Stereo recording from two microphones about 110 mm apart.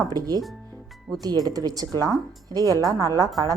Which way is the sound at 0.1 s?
35° right (ahead or behind).